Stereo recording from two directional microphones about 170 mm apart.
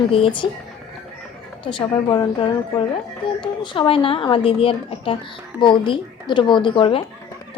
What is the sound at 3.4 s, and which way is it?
A woman's voice, 30° left (ahead or behind).